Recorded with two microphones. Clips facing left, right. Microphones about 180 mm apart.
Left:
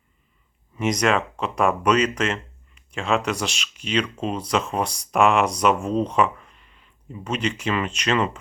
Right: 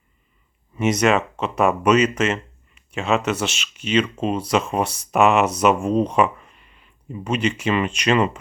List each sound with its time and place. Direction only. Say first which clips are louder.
0.8 s speech: right 3 dB; 5° right (ahead or behind)